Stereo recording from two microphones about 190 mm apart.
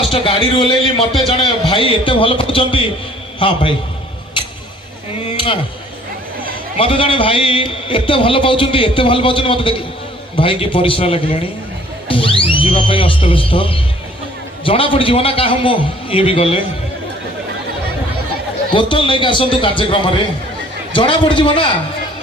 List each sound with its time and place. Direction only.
0.1 s a man's voice: 25° left (ahead or behind)
6.7 s a man's voice: 30° left (ahead or behind)
18.7 s a man's voice: 25° left (ahead or behind)